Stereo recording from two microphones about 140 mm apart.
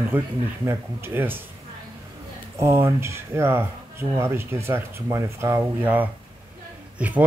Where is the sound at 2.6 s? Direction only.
20° right (ahead or behind).